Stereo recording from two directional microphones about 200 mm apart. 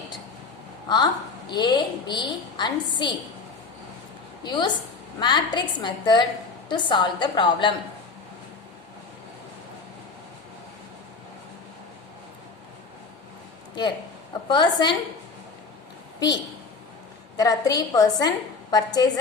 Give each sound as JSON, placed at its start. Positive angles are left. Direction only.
{"t": 0.9, "sound": "a woman's voice", "side_deg": 20}
{"t": 4.4, "sound": "a woman's voice", "side_deg": 20}
{"t": 14.4, "sound": "a woman's voice", "side_deg": 20}
{"t": 17.3, "sound": "a woman's voice", "side_deg": 20}